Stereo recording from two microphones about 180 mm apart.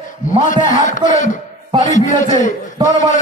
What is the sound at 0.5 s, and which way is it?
A man's voice, 45° left (ahead or behind).